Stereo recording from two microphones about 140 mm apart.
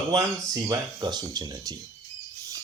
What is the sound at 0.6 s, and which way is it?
A man's voice, 25° right (ahead or behind).